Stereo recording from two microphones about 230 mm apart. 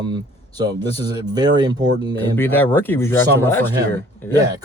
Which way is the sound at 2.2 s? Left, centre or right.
Centre.